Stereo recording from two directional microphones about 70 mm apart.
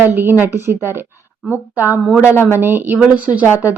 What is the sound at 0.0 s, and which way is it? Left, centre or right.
Speech, right.